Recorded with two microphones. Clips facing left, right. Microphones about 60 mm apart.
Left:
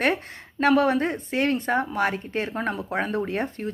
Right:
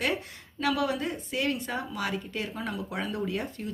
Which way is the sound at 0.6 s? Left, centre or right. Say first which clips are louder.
Left 8 dB; left.